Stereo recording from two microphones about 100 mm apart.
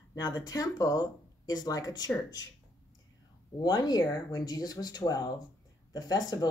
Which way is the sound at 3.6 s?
40° left (ahead or behind).